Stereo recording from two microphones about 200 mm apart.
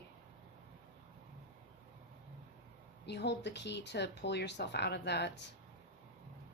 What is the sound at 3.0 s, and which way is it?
Speech, 55° left (ahead or behind).